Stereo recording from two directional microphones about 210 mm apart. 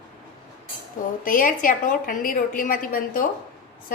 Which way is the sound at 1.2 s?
40° left (ahead or behind).